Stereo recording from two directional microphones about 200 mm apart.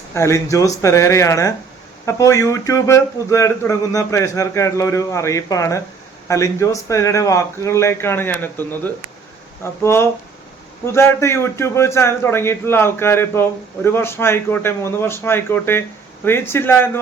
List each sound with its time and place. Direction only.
0.1 s a man's voice: 15° left (ahead or behind)